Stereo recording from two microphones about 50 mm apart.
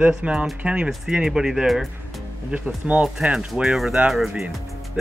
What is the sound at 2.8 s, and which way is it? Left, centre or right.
Speech, centre.